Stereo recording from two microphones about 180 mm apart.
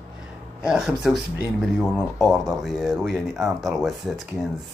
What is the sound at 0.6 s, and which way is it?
Speech, centre (ahead or behind).